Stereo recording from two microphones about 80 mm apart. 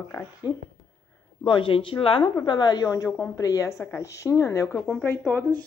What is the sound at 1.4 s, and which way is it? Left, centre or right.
Speech, left.